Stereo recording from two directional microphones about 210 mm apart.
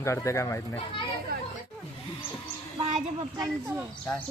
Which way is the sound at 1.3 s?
45° right (ahead or behind).